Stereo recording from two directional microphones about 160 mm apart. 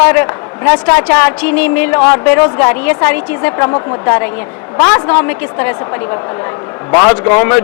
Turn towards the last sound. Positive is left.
turn(degrees=15)  # may be behind; listen again after turning